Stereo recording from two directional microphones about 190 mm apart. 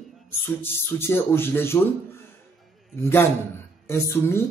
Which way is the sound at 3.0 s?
15° left (ahead or behind).